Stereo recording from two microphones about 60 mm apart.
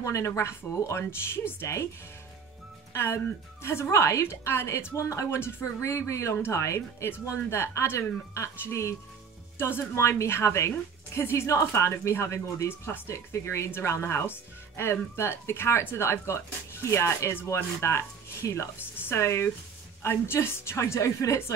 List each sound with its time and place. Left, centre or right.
0.0 s speech: left
2.9 s speech: left
3.9 s speech: left
6.3 s speech: left
6.6 s speech: left
9.6 s speech: left